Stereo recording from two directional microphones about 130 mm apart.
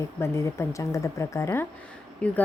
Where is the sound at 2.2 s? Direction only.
10° left (ahead or behind).